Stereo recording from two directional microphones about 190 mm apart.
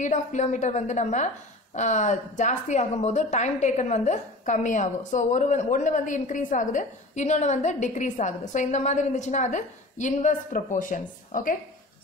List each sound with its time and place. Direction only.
0.0 s a woman's voice: 40° left (ahead or behind)